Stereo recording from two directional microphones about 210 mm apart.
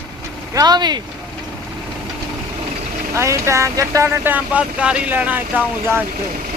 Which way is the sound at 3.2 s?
15° right (ahead or behind).